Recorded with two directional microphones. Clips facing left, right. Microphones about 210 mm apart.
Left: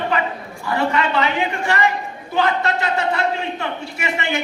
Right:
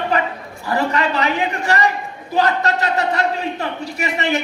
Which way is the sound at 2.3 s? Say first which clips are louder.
Right 2 dB; 40° right (ahead or behind).